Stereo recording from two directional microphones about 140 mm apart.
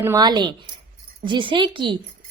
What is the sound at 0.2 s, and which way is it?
A woman's voice, 30° right (ahead or behind).